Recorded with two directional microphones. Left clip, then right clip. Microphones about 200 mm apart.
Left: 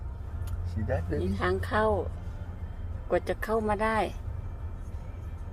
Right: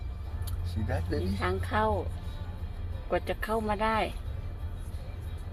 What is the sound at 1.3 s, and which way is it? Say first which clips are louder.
Speech: left 2 dB; 15° left (ahead or behind).